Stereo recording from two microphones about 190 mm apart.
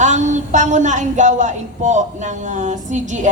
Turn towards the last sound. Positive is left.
turn(degrees=-40)  # may be behind; listen again after turning